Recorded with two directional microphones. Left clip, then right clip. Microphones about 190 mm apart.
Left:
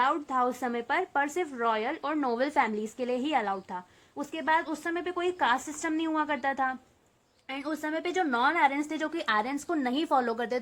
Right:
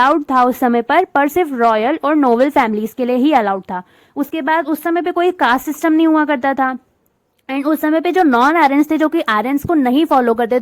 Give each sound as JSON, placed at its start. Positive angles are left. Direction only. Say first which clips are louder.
{"t": 0.0, "sound": "speech", "louder": "right 14 dB", "side_deg": -45}